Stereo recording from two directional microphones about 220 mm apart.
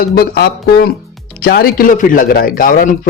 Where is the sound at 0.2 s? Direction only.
45° left (ahead or behind).